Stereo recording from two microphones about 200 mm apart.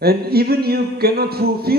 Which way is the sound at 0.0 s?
50° right (ahead or behind).